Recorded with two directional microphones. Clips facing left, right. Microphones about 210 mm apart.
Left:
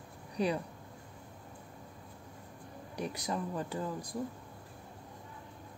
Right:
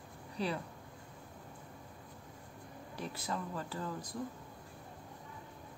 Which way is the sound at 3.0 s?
15° left (ahead or behind).